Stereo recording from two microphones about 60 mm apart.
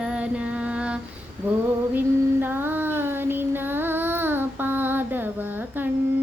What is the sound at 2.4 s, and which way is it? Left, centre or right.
Child singing, right.